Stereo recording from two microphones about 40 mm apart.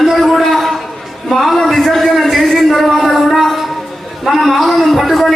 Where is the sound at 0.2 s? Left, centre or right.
Centre.